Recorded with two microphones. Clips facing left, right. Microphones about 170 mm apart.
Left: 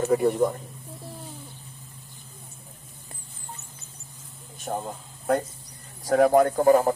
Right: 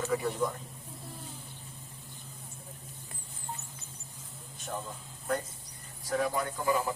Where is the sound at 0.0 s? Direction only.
55° left (ahead or behind).